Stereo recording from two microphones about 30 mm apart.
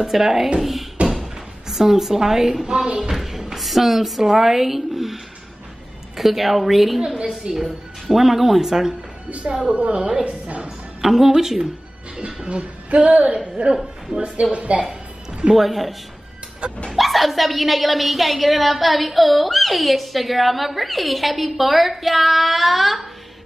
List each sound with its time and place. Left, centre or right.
0.0 s a woman's voice: centre; by 3.1 s right
3.1 s a woman's voice: centre
7.5 s a woman's voice: right
8.1 s a woman's voice: centre
9.5 s a woman's voice: right
11.0 s a woman's voice: centre
12.4 s music: right
13.6 s a woman's voice: right
14.5 s a woman's voice: right
15.5 s a woman's voice: centre
16.9 s a woman's voice: centre